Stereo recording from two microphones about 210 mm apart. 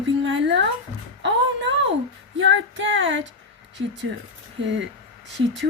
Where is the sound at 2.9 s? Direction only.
65° right (ahead or behind).